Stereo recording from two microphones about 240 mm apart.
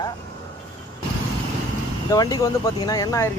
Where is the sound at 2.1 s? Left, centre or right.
Centre.